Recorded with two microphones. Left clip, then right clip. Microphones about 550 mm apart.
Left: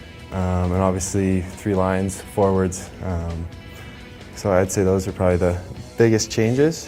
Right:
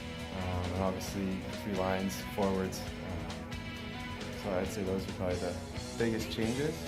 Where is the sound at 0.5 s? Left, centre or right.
Left.